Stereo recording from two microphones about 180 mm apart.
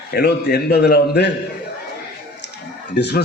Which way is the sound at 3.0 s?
70° left (ahead or behind).